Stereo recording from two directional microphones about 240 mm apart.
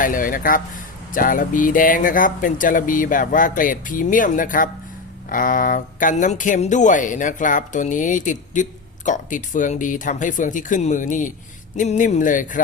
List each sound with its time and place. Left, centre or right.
0.0 s speech: left